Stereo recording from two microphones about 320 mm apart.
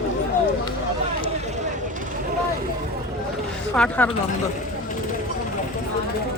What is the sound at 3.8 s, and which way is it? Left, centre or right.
Speech, centre.